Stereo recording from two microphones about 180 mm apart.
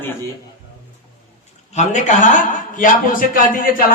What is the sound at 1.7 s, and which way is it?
A man's voice, 40° left (ahead or behind).